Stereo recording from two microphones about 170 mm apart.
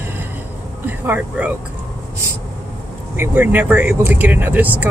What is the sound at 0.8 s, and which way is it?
Speech, 10° right (ahead or behind).